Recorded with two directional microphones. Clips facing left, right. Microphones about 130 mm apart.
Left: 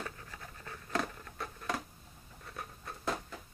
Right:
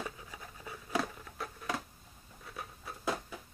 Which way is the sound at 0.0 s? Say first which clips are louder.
Right 1 dB; 10° right (ahead or behind).